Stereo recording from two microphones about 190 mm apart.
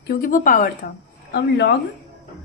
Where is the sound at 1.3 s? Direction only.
60° left (ahead or behind).